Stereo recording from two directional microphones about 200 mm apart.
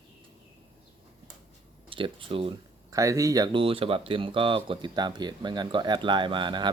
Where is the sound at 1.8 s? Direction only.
25° right (ahead or behind).